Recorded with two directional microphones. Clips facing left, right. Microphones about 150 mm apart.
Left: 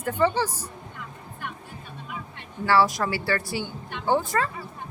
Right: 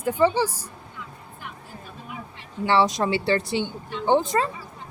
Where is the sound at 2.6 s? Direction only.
20° right (ahead or behind).